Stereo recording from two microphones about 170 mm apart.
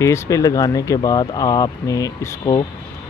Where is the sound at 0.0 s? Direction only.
20° left (ahead or behind).